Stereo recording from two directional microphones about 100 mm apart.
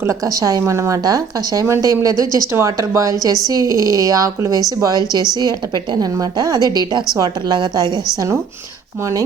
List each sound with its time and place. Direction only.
0.0 s a woman's voice: 35° right (ahead or behind)